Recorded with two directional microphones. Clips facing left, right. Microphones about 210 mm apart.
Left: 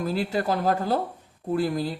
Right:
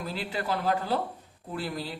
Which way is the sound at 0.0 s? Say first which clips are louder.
Left 8 dB; 45° left (ahead or behind).